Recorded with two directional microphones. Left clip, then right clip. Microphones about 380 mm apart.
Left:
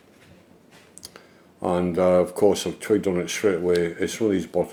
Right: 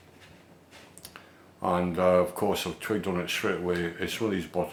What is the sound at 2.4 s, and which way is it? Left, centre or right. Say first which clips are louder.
Speech: left 8 dB; right.